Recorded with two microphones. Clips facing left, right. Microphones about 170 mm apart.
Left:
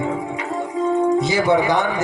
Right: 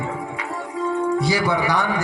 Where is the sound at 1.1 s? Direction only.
20° left (ahead or behind).